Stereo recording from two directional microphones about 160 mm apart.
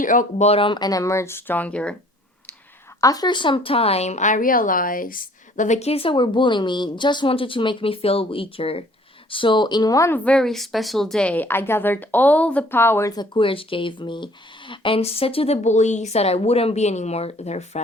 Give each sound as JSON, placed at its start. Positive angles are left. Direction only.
{"t": 0.0, "sound": "speech", "side_deg": 55}
{"t": 3.0, "sound": "a woman's voice", "side_deg": 25}
{"t": 10.2, "sound": "a woman's voice", "side_deg": 5}